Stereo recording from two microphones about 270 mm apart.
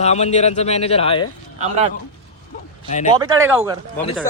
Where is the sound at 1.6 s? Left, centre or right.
Right.